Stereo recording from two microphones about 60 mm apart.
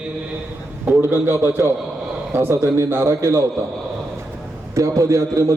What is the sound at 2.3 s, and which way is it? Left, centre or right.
A man's voice, right.